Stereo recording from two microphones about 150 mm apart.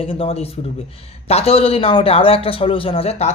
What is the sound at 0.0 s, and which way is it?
A man's voice, 40° left (ahead or behind).